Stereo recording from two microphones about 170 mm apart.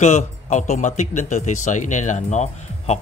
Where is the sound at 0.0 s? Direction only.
45° left (ahead or behind).